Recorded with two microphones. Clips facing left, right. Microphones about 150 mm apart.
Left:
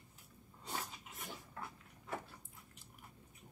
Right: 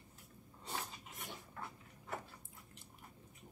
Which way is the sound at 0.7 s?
Centre (ahead or behind).